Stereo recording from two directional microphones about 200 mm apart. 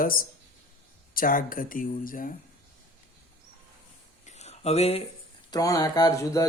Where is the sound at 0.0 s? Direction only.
45° left (ahead or behind).